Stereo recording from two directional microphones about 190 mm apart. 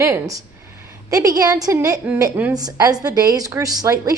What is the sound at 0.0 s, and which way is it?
A woman's voice, 15° right (ahead or behind).